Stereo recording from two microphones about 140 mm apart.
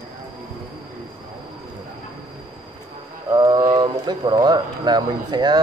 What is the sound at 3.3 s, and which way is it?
Speech, 30° right (ahead or behind).